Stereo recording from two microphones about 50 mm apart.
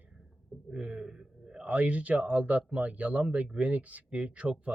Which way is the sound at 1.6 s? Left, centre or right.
Right.